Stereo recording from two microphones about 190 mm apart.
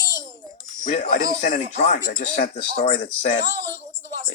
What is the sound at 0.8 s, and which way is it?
Speech, 45° left (ahead or behind).